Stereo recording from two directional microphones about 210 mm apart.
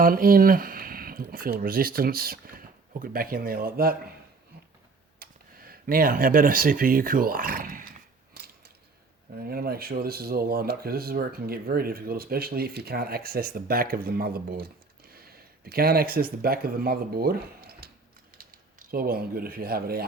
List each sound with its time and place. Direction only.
0.0 s speech: 45° right (ahead or behind)
5.2 s speech: 45° right (ahead or behind)
8.3 s mechanisms: 45° right (ahead or behind)
9.3 s speech: 45° right (ahead or behind)